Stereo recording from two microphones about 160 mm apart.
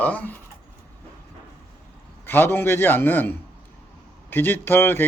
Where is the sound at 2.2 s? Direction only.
15° left (ahead or behind).